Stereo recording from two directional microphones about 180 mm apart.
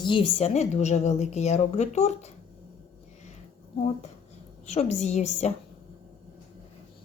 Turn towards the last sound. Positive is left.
turn(degrees=40)  # may be behind; listen again after turning